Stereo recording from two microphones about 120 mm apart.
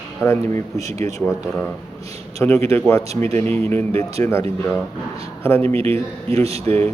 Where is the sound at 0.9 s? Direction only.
70° right (ahead or behind).